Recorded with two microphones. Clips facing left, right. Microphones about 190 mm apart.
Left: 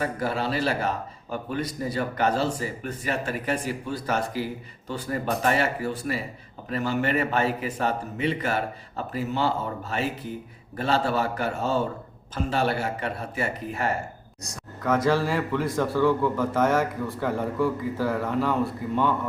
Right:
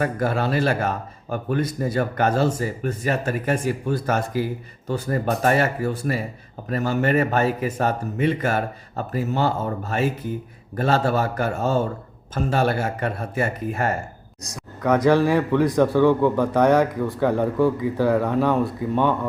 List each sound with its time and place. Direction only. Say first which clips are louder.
0.0 s speech: right 4 dB; 50° right (ahead or behind)
14.5 s a man's voice: right 4 dB; 15° right (ahead or behind)